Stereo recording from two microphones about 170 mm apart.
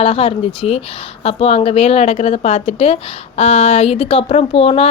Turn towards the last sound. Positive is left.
turn(degrees=35)  # may be behind; listen again after turning